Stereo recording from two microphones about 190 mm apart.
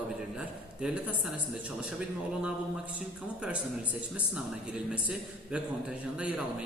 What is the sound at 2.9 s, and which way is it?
Speech, 5° right (ahead or behind).